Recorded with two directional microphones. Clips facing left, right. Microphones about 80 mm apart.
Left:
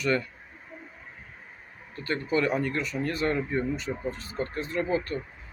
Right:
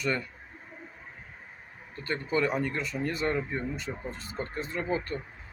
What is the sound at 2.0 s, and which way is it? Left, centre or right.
Speech, right.